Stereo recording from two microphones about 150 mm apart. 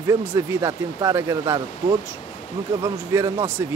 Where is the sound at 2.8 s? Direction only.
20° right (ahead or behind).